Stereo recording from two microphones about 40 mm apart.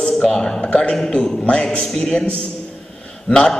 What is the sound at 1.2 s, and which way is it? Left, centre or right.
Speech, left.